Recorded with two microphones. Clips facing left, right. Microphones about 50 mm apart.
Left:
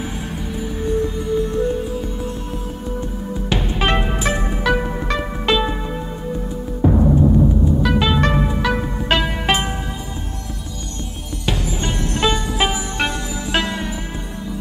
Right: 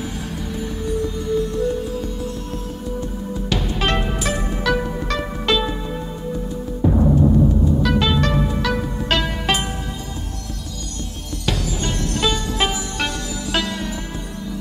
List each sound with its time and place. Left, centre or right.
0.8 s music: left
3.4 s music: left
7.0 s music: centre
8.2 s music: left
11.4 s music: centre